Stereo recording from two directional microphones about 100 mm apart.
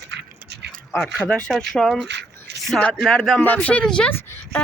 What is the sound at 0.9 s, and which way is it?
A woman's voice, 5° left (ahead or behind).